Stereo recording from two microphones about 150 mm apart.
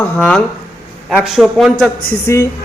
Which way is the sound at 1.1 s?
Centre (ahead or behind).